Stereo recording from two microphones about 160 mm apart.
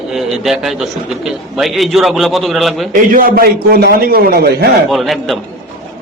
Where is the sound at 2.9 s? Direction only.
60° right (ahead or behind); by 4.6 s 80° right.